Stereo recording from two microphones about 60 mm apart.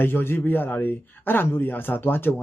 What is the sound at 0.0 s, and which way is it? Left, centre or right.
Speech, left.